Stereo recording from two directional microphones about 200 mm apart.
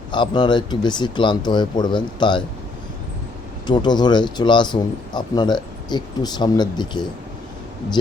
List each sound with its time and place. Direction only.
0.1 s speech: 20° left (ahead or behind)
3.7 s speech: 20° left (ahead or behind)